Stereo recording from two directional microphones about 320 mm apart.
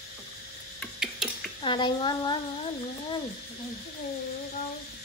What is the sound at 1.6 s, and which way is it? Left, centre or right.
Speech, centre.